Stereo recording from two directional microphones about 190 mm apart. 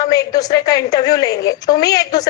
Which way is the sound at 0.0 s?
20° left (ahead or behind).